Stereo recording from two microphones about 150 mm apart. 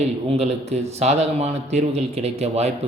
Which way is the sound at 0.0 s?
45° right (ahead or behind).